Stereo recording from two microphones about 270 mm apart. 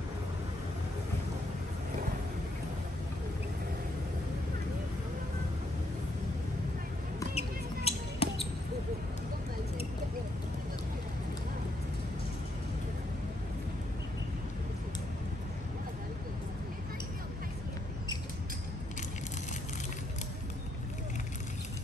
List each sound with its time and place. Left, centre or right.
7.3 s basketball bounce: left